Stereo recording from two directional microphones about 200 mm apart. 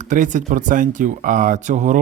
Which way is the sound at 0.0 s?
40° right (ahead or behind).